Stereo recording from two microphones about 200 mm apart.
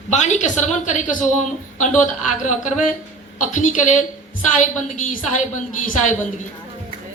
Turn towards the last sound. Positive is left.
turn(degrees=40)  # may be behind; listen again after turning